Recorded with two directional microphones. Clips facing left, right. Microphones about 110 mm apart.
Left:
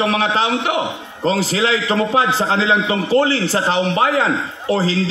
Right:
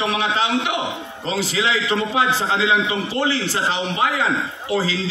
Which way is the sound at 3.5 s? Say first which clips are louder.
Left 5 dB; 45° left (ahead or behind).